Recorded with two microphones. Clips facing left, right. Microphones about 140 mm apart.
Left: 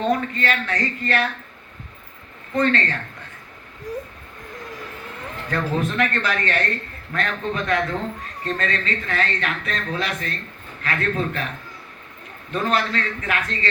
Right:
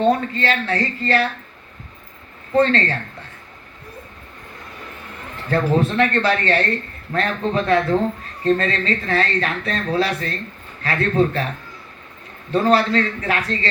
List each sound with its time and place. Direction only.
0.0 s speech: 30° right (ahead or behind)
2.6 s speech: 30° right (ahead or behind)
5.5 s speech: 30° right (ahead or behind)
12.5 s speech: 35° right (ahead or behind)